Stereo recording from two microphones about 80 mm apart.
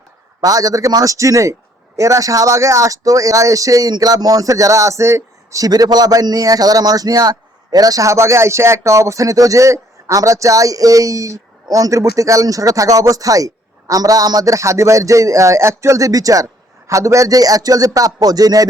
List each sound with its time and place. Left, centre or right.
0.4 s speech: right